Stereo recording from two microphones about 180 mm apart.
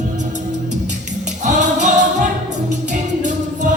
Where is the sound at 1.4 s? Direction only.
45° right (ahead or behind).